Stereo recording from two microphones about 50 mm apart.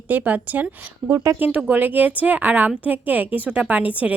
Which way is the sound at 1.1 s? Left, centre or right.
Right.